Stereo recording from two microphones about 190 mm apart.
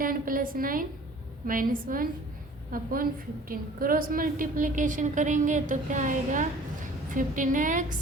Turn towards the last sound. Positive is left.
turn(degrees=-45)  # may be behind; listen again after turning